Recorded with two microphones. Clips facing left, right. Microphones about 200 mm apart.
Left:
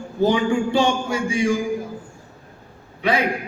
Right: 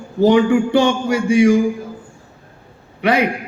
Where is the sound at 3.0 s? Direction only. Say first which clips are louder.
Right 5 dB; 70° right (ahead or behind).